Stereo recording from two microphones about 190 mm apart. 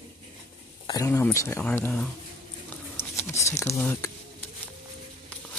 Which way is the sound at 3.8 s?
10° left (ahead or behind).